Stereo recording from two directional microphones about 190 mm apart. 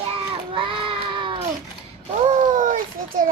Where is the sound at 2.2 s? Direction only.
40° right (ahead or behind).